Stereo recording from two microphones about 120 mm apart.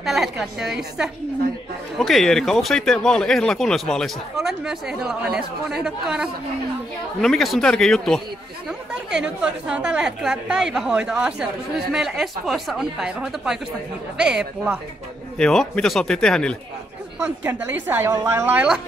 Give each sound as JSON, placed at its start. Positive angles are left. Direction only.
{"t": 0.0, "sound": "a woman's voice", "side_deg": 0}
{"t": 15.3, "sound": "speech", "side_deg": 5}
{"t": 17.4, "sound": "a woman's voice", "side_deg": -15}